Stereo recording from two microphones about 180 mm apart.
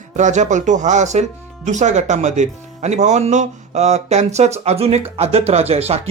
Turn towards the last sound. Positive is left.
turn(degrees=-35)  # may be behind; listen again after turning